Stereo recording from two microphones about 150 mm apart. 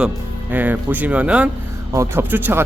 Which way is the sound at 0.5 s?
10° right (ahead or behind).